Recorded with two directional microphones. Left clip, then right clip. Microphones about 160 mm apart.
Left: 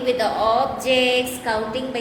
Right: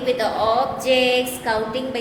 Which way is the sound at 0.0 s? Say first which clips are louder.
Even; 20° left (ahead or behind).